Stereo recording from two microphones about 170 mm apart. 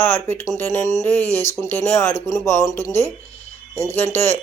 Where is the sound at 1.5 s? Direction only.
15° left (ahead or behind).